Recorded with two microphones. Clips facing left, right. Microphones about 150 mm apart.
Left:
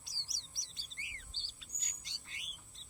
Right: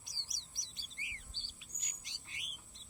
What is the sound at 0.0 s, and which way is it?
Chirp, 20° right (ahead or behind).